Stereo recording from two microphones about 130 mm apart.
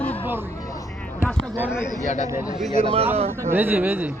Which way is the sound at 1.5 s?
10° right (ahead or behind).